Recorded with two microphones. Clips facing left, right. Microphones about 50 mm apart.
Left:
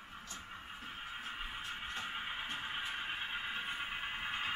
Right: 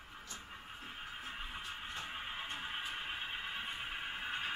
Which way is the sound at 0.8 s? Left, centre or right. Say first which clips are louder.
Left 1 dB; centre.